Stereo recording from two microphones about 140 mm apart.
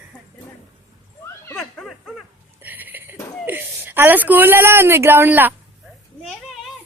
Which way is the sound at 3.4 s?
15° right (ahead or behind).